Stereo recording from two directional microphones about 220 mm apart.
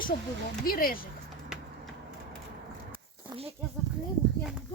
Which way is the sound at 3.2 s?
25° right (ahead or behind).